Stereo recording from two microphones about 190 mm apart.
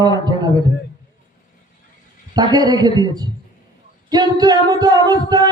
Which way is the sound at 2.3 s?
20° right (ahead or behind).